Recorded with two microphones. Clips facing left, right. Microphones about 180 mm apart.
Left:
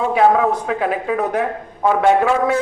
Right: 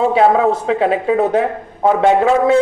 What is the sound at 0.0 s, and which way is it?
A man's voice, 25° right (ahead or behind).